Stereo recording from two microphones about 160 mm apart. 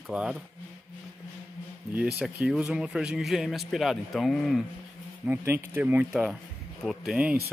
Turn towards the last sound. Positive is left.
turn(degrees=-10)  # may be behind; listen again after turning